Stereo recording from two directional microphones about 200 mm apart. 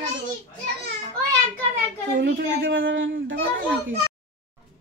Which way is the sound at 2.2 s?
45° right (ahead or behind).